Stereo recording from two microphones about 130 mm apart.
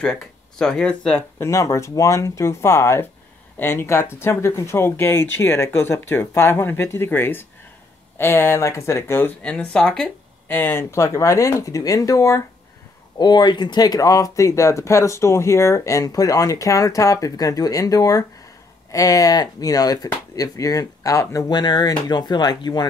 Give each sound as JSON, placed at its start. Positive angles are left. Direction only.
{"t": 0.0, "sound": "speech", "side_deg": 5}
{"t": 1.4, "sound": "speech", "side_deg": 25}
{"t": 10.5, "sound": "speech", "side_deg": 15}
{"t": 13.2, "sound": "speech", "side_deg": 35}